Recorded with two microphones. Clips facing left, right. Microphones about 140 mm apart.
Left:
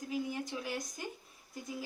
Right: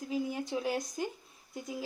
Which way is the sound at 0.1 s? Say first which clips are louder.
Right 4 dB; 30° right (ahead or behind).